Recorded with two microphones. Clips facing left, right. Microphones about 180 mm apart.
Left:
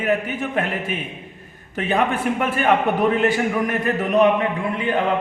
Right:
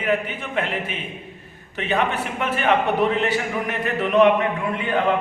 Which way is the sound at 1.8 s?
45° left (ahead or behind).